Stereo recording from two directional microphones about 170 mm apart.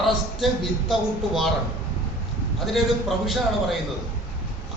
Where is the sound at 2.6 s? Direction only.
Centre (ahead or behind).